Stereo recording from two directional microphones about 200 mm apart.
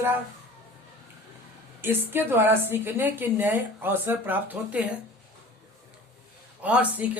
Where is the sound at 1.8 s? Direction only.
10° right (ahead or behind).